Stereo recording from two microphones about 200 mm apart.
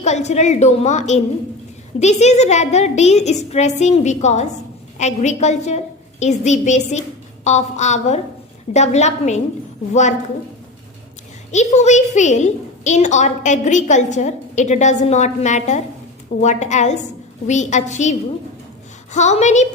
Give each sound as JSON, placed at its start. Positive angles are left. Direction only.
{"t": 0.0, "sound": "a woman's voice", "side_deg": 35}
{"t": 11.5, "sound": "a woman's voice", "side_deg": 35}
{"t": 19.1, "sound": "a woman's voice", "side_deg": 35}